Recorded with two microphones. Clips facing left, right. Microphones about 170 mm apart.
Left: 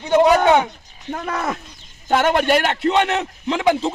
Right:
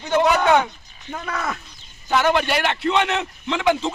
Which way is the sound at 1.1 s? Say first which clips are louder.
Left 3 dB; 35° left (ahead or behind).